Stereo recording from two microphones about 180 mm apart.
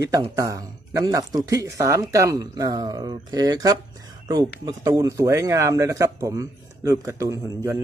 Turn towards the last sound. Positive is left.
turn(degrees=-15)  # may be behind; listen again after turning